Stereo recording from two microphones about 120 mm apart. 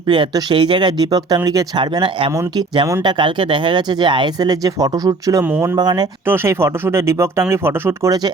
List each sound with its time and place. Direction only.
0.1 s speech: 40° right (ahead or behind)
2.3 s speech: 25° right (ahead or behind)
3.0 s speech: 40° right (ahead or behind)
5.5 s speech: 15° right (ahead or behind)
5.7 s speech: 35° right (ahead or behind)
6.2 s speech: 20° right (ahead or behind)